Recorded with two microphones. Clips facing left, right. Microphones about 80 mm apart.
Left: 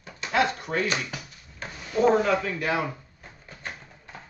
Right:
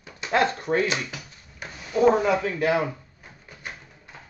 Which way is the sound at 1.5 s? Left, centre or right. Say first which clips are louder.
Right 1 dB; centre.